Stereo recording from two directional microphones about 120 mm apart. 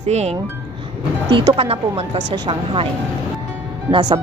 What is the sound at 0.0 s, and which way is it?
Speech, 60° right (ahead or behind).